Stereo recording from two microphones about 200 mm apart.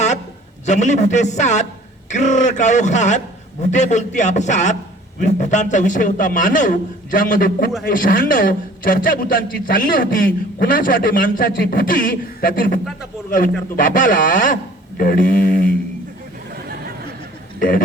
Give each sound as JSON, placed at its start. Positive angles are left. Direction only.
{"t": 0.6, "sound": "a man's voice", "side_deg": 35}
{"t": 17.6, "sound": "a man's voice", "side_deg": 45}